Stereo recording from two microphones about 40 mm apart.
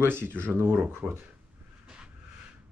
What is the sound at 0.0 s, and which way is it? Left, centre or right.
Speech, right.